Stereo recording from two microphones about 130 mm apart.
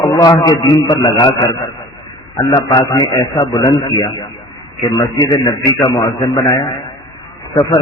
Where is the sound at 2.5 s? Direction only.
35° left (ahead or behind).